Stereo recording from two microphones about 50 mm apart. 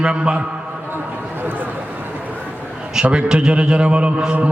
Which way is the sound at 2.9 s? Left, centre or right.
Right.